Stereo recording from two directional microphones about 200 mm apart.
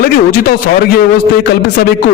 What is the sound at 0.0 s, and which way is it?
Speech, 45° left (ahead or behind).